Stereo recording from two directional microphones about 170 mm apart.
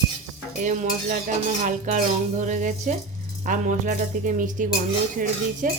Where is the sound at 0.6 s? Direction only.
50° right (ahead or behind).